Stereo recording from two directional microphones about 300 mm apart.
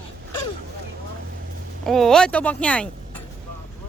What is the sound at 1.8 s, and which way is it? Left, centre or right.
Speech, centre.